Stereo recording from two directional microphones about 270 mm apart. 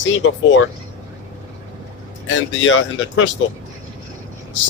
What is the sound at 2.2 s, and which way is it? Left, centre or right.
Speech, left.